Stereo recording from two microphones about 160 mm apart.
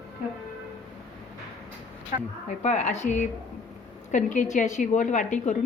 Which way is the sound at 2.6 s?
45° left (ahead or behind).